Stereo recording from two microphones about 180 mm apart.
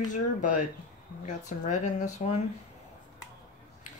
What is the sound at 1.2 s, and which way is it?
Speech, 40° left (ahead or behind).